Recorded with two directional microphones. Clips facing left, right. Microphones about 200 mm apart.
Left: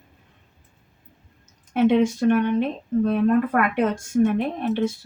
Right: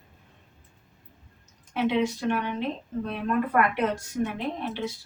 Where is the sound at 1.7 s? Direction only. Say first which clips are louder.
Left 7 dB; 50° left (ahead or behind).